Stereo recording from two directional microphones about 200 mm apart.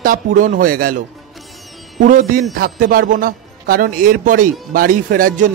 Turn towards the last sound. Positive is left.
turn(degrees=-45)  # may be behind; listen again after turning